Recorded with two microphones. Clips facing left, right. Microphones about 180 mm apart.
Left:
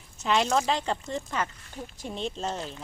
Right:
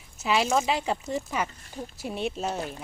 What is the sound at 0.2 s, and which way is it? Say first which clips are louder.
Speech: even; 5° right (ahead or behind).